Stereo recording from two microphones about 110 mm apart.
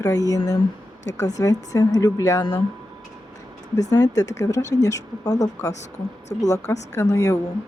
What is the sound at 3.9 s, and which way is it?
Speech, 35° left (ahead or behind).